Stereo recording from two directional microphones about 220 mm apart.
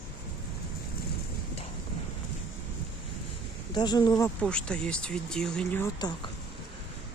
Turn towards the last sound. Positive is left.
turn(degrees=20)  # may be behind; listen again after turning